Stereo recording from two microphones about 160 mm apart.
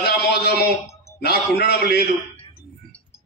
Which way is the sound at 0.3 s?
90° left.